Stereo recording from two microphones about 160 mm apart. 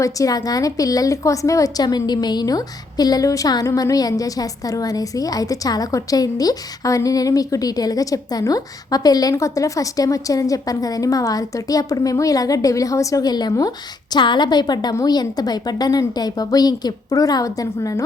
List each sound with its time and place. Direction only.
0.0 s a woman's voice: 20° left (ahead or behind)